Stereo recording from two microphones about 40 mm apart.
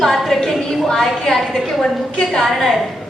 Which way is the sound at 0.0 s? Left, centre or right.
Centre.